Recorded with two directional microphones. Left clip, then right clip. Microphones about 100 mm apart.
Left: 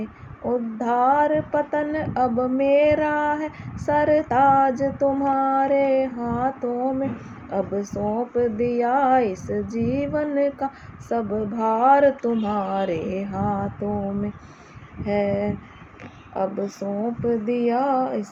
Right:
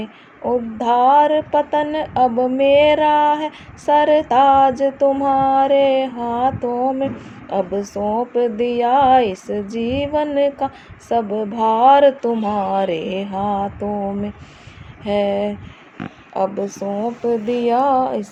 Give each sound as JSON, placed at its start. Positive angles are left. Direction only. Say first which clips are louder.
{"t": 0.0, "sound": "speech", "louder": "right 5 dB", "side_deg": -50}
{"t": 15.0, "sound": "speech", "louder": "right 5 dB", "side_deg": -45}